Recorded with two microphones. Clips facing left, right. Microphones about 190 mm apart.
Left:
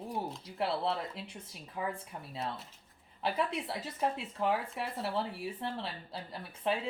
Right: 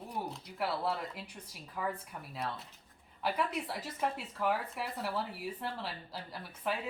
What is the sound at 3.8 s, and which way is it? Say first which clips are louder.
Speech: left 2 dB; 25° left (ahead or behind).